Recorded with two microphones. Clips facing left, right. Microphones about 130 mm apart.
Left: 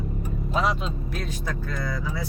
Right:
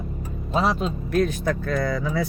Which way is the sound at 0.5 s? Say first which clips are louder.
Right 3 dB; 35° right (ahead or behind).